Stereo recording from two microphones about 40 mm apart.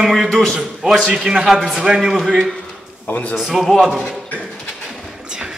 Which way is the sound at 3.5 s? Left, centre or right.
Centre.